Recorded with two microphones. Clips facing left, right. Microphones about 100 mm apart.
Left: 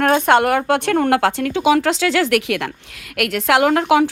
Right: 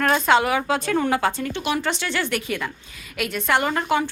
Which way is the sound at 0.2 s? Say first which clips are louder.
Left 4 dB; 60° left (ahead or behind).